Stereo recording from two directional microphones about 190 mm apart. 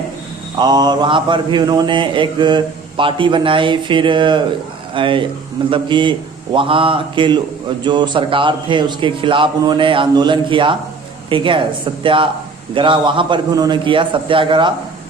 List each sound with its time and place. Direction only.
0.5 s speech: 20° right (ahead or behind)